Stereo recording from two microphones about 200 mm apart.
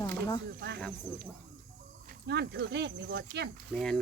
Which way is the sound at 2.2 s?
60° right (ahead or behind).